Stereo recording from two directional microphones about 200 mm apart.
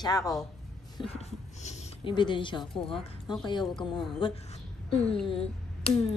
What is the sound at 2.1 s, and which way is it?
Beatboxing, 25° left (ahead or behind).